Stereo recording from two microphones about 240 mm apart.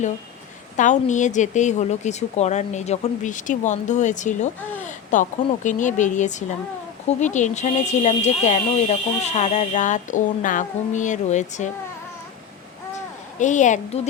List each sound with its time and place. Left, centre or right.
0.8 s speech: left
13.4 s speech: left